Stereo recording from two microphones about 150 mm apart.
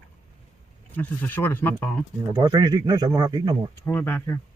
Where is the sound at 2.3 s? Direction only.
30° right (ahead or behind).